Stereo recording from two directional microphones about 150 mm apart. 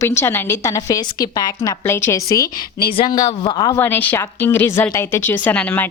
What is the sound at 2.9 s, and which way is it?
Speech, 30° left (ahead or behind).